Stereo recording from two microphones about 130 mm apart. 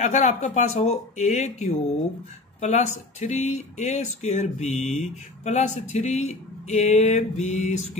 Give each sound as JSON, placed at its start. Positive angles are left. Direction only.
{"t": 0.0, "sound": "speech", "side_deg": 65}